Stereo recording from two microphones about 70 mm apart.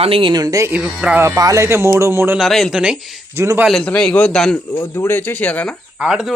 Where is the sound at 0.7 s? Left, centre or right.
Centre.